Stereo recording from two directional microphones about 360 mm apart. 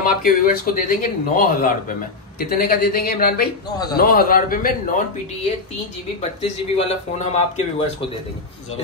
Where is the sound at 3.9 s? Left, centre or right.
Left.